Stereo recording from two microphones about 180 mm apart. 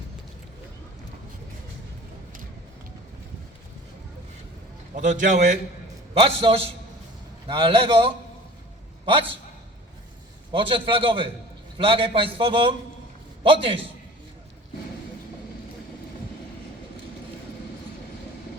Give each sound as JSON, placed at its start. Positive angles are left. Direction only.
{"t": 4.9, "sound": "a man's voice", "side_deg": -45}
{"t": 10.5, "sound": "a man's voice", "side_deg": -30}